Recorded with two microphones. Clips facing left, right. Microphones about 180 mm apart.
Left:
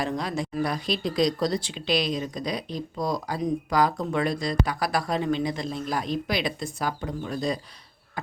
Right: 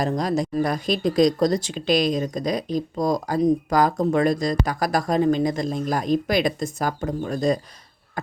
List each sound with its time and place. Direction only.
0.0 s speech: 40° right (ahead or behind)